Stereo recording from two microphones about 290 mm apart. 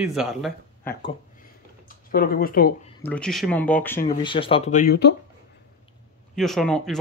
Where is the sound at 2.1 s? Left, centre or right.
Left.